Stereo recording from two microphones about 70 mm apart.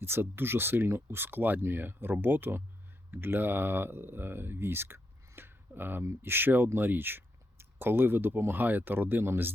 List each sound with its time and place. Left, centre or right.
0.0 s speech: right